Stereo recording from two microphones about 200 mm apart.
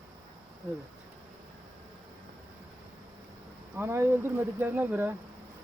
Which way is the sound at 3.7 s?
15° right (ahead or behind).